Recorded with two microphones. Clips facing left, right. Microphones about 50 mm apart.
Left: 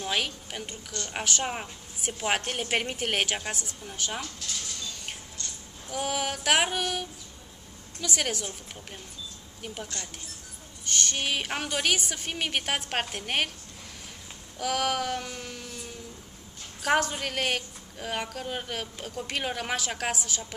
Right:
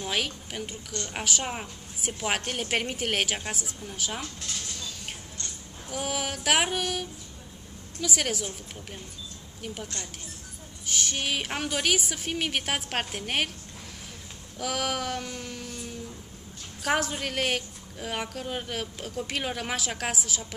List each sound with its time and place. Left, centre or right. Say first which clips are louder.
0.0 s a woman's voice: even; centre
0.7 s a woman's voice: right 1 dB; centre
1.1 s a woman's voice: left 1 dB; centre
5.9 s a woman's voice: left 1 dB; centre
9.6 s a woman's voice: right 1 dB; centre
14.6 s a woman's voice: left 2 dB; centre
16.8 s a woman's voice: left 2 dB; centre